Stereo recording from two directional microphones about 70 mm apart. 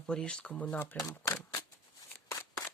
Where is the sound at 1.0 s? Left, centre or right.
Left.